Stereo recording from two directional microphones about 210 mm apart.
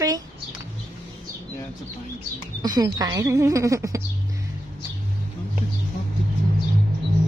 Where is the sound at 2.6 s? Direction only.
20° right (ahead or behind).